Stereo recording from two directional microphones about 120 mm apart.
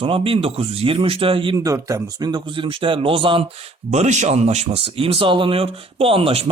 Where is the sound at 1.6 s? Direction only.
25° right (ahead or behind); by 3.4 s 45° right (ahead or behind).